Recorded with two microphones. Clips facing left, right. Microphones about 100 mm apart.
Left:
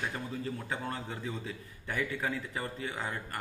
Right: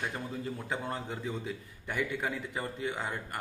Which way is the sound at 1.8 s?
20° right (ahead or behind).